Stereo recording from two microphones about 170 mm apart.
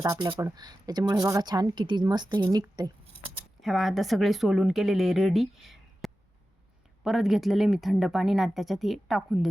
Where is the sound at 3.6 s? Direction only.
Centre (ahead or behind).